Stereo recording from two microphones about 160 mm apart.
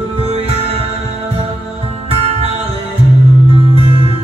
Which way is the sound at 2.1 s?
40° right (ahead or behind).